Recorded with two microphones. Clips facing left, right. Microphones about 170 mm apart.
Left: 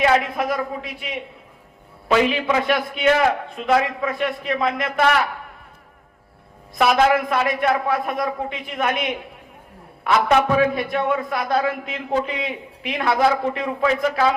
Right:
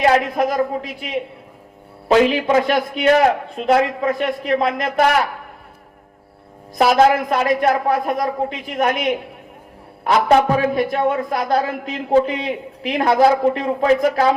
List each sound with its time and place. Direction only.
0.0 s a man's voice: 40° right (ahead or behind)
6.9 s a man's voice: 40° right (ahead or behind)
10.0 s a man's voice: 35° right (ahead or behind)